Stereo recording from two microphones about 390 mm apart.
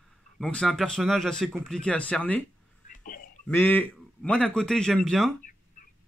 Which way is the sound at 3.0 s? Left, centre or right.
Left.